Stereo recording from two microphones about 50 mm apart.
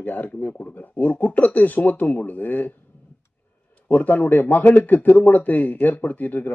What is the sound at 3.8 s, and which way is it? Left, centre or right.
Speech, left.